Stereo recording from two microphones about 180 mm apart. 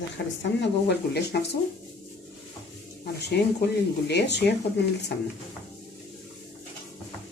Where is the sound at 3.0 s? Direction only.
65° left (ahead or behind).